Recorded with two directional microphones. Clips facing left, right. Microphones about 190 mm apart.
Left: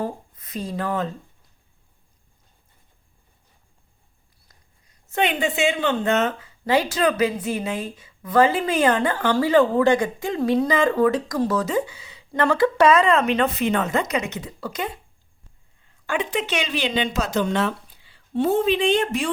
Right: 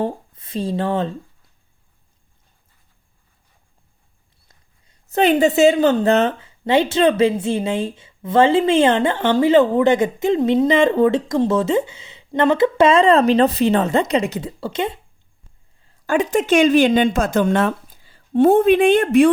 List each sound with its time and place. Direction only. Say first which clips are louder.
0.0 s speech: right 5 dB; 30° right (ahead or behind)
4.4 s speech: right 1 dB; 30° right (ahead or behind)
16.0 s speech: right 8 dB; 40° right (ahead or behind); by 19.3 s 55° right (ahead or behind)